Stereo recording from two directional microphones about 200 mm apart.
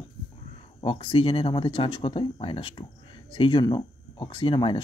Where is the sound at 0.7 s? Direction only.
30° left (ahead or behind).